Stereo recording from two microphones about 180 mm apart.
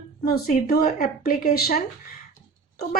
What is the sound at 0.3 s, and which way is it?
A woman's voice, 55° left (ahead or behind).